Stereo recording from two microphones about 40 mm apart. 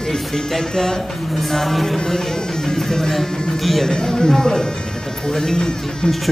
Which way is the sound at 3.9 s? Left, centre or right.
Centre.